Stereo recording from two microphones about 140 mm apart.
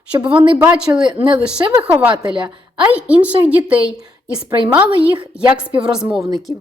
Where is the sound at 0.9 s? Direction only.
20° right (ahead or behind).